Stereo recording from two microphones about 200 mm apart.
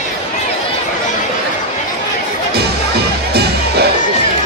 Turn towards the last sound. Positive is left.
turn(degrees=-55)  # may be behind; listen again after turning